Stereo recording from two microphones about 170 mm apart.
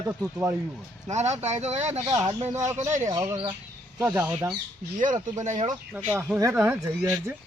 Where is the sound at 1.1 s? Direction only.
40° right (ahead or behind).